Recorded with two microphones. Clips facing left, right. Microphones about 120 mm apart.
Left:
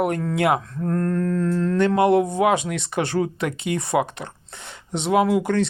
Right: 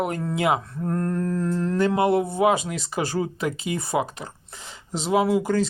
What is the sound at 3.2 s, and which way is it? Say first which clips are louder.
Speech: left 2 dB; 65° left (ahead or behind).